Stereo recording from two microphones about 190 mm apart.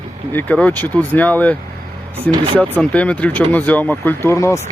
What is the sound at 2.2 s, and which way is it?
Speech, 25° right (ahead or behind).